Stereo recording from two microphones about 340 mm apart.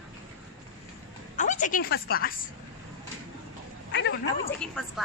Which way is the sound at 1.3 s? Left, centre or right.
Left.